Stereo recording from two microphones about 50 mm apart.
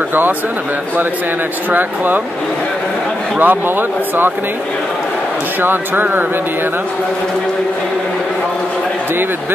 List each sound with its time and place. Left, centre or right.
1.7 s speech: right
3.3 s speech: right
5.6 s speech: right